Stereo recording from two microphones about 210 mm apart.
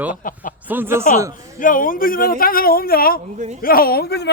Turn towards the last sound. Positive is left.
turn(degrees=50)  # may be behind; listen again after turning